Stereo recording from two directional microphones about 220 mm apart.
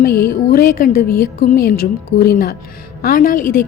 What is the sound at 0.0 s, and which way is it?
A woman's voice, 45° left (ahead or behind).